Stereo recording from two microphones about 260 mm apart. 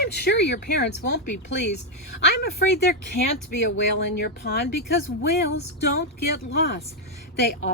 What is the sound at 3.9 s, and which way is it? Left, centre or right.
Speech, left.